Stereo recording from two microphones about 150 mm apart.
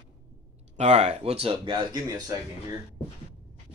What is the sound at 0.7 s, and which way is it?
Speech, 45° right (ahead or behind).